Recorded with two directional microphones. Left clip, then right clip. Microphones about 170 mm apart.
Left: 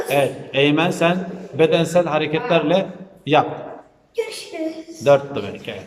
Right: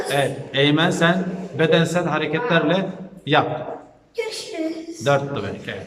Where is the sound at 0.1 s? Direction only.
10° left (ahead or behind).